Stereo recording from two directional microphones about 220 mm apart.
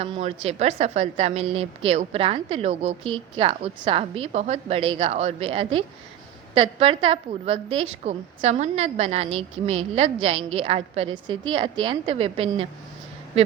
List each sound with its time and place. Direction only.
0.0 s a woman's voice: 30° right (ahead or behind)